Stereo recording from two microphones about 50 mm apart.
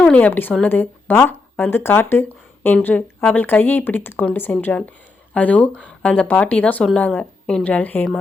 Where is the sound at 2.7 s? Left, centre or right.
Left.